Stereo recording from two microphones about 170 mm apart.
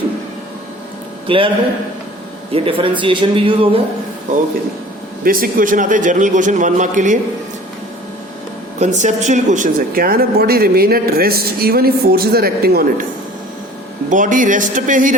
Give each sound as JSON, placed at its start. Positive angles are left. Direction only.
{"t": 2.5, "sound": "speech", "side_deg": -35}
{"t": 5.2, "sound": "a man's voice", "side_deg": -55}
{"t": 8.8, "sound": "speech", "side_deg": -45}
{"t": 14.1, "sound": "a man's voice", "side_deg": -50}